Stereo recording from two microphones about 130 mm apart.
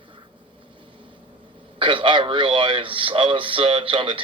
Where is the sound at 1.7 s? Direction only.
40° right (ahead or behind).